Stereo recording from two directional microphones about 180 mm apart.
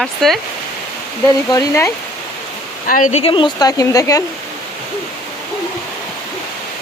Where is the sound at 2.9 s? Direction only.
45° left (ahead or behind).